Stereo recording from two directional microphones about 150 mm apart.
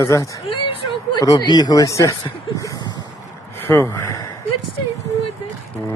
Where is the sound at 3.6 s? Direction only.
20° left (ahead or behind).